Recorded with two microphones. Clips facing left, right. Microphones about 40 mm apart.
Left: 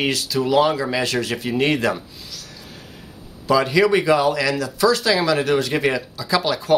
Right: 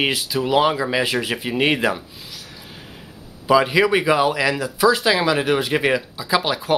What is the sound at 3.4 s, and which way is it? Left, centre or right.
Speech, centre.